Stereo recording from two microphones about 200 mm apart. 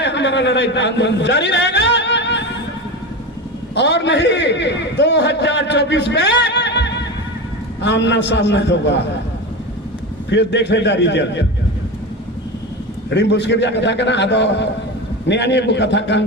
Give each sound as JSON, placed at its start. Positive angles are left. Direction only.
{"t": 0.0, "sound": "a man's voice", "side_deg": 60}
{"t": 3.8, "sound": "a man's voice", "side_deg": 60}
{"t": 10.3, "sound": "a man's voice", "side_deg": 60}
{"t": 13.1, "sound": "a man's voice", "side_deg": 60}